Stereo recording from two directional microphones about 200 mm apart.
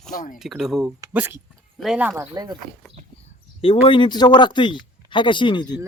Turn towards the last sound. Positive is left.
turn(degrees=25)  # may be behind; listen again after turning